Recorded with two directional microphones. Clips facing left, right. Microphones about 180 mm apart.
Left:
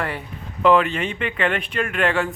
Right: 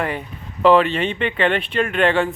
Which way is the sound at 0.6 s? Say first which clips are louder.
Right 3 dB; 30° right (ahead or behind).